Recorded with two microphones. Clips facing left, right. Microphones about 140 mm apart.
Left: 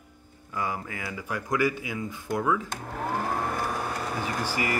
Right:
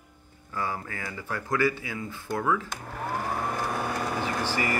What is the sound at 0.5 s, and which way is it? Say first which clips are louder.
Speech: left 1 dB; 15° left (ahead or behind).